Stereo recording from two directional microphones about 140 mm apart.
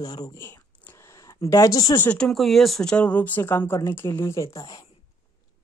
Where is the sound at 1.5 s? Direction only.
25° left (ahead or behind).